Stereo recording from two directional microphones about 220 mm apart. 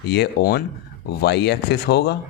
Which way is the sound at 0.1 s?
50° left (ahead or behind).